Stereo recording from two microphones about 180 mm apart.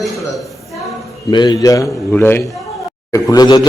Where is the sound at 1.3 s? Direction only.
25° left (ahead or behind).